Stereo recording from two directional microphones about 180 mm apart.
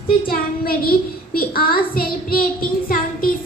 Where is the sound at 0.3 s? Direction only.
55° left (ahead or behind).